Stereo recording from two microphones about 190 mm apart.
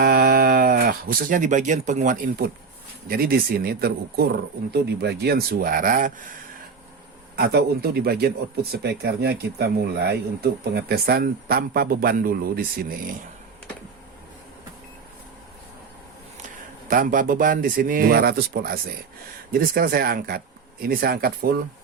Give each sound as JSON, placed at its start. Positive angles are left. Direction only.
{"t": 0.0, "sound": "a sound", "side_deg": -55}
{"t": 3.1, "sound": "speech", "side_deg": -50}
{"t": 7.3, "sound": "speech", "side_deg": -55}
{"t": 16.9, "sound": "speech", "side_deg": -45}